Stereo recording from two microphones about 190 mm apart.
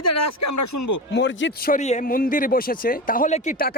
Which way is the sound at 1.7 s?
40° left (ahead or behind).